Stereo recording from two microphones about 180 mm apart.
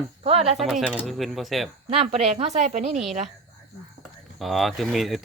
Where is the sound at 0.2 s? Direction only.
35° right (ahead or behind).